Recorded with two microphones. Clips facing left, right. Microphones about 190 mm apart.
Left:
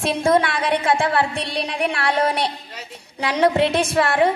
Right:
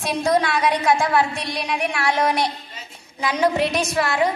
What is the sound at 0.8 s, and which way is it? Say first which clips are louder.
A woman's voice: even; 30° left (ahead or behind).